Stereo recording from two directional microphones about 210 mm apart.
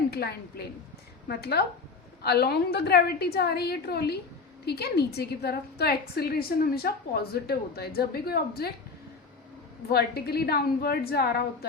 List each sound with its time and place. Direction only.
0.1 s a woman's voice: 50° left (ahead or behind)
9.9 s a woman's voice: 50° left (ahead or behind)